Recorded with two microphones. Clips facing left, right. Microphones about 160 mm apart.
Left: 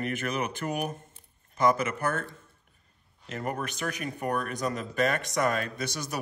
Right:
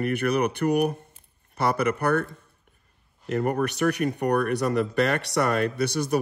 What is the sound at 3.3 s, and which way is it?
Speech, 55° right (ahead or behind).